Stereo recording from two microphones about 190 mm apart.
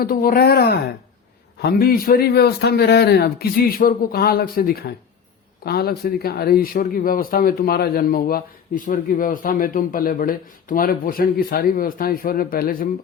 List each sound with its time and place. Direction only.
0.0 s speech: 50° left (ahead or behind)